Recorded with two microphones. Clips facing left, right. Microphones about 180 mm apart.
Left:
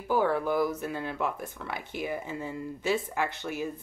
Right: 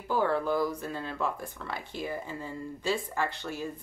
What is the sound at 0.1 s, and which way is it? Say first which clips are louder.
Speech: left 1 dB; 15° left (ahead or behind).